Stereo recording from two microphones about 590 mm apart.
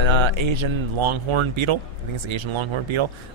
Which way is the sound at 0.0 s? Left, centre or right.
Right.